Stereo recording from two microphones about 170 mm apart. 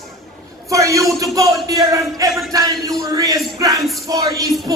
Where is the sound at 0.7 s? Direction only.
20° right (ahead or behind).